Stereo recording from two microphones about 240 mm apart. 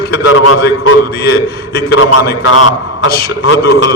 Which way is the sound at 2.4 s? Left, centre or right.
Left.